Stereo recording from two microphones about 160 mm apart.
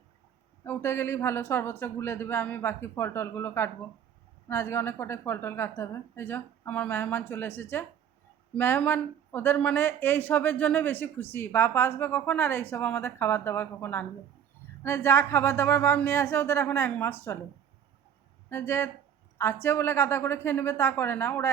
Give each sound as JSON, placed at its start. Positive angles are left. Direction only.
{"t": 0.6, "sound": "speech", "side_deg": 15}
{"t": 18.5, "sound": "speech", "side_deg": 15}